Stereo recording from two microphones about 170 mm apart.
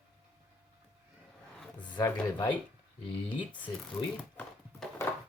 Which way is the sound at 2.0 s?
15° left (ahead or behind).